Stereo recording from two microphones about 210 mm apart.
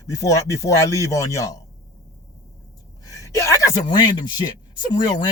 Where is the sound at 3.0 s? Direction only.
15° left (ahead or behind).